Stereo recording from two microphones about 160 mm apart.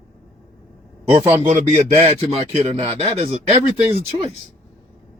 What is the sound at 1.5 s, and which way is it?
Speech, 40° right (ahead or behind).